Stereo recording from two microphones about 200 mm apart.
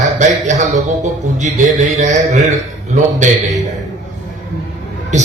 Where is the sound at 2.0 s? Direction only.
35° right (ahead or behind).